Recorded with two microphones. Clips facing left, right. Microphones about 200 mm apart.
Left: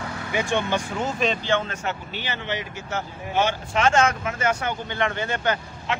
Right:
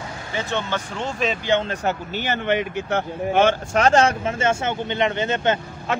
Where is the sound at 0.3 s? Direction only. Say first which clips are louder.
Left 2 dB; 15° left (ahead or behind).